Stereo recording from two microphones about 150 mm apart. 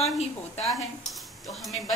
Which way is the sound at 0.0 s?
45° left (ahead or behind).